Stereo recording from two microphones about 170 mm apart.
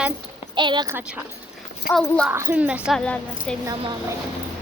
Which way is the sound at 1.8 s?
Centre (ahead or behind).